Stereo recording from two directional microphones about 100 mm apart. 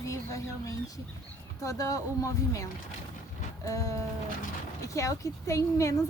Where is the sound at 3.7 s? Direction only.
35° left (ahead or behind).